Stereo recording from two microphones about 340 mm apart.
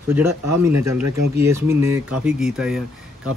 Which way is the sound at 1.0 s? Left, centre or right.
Right.